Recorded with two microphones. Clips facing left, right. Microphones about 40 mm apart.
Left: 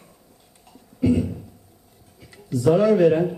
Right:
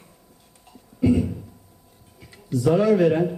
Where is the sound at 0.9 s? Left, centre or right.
Centre.